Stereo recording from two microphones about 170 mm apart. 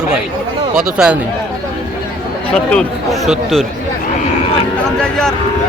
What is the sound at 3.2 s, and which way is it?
Speech, centre (ahead or behind).